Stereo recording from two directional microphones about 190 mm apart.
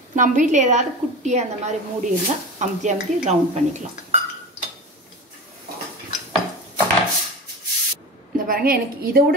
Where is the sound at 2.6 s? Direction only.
40° right (ahead or behind).